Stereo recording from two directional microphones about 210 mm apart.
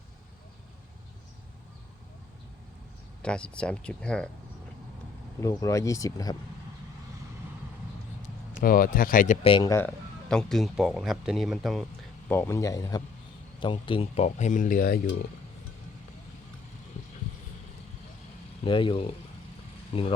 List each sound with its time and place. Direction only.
3.2 s speech: 5° left (ahead or behind)
5.4 s speech: 15° left (ahead or behind)
8.2 s speech: 45° left (ahead or behind)
9.5 s speech: 20° left (ahead or behind); by 11.9 s centre (ahead or behind)
12.3 s speech: 10° left (ahead or behind); by 15.0 s 45° left (ahead or behind)
18.6 s speech: 25° left (ahead or behind)